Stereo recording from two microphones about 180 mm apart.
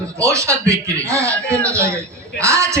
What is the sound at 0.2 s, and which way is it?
Speech, 15° right (ahead or behind).